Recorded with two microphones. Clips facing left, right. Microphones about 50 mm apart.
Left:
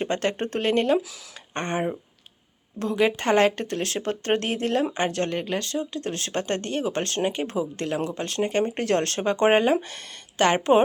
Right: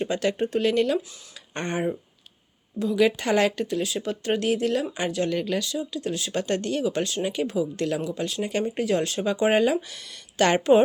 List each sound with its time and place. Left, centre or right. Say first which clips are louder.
0.0 s speech: right 1 dB; left
2.9 s speech: even; left
8.8 s speech: even; left
9.2 s speech: left 2 dB; left
10.3 s speech: right 1 dB; left